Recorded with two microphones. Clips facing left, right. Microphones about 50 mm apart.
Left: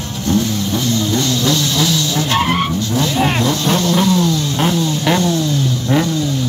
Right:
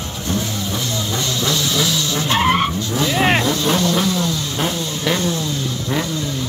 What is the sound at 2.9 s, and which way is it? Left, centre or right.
Vehicle, centre.